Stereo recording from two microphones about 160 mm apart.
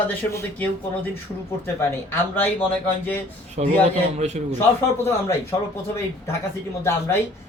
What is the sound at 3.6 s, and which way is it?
Speech, 50° right (ahead or behind).